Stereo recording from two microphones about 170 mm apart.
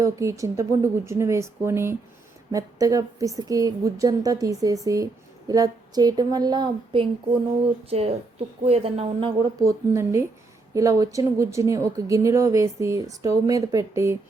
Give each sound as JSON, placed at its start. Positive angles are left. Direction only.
{"t": 0.0, "sound": "a woman's voice", "side_deg": -20}
{"t": 9.6, "sound": "speech", "side_deg": -15}